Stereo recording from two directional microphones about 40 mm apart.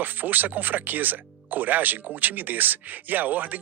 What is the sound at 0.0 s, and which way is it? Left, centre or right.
Speech, right.